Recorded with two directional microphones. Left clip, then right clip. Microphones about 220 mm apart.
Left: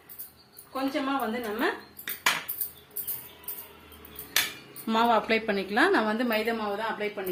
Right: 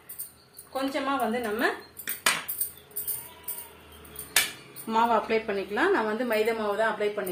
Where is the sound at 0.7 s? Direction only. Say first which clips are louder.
Right 1 dB; 10° left (ahead or behind).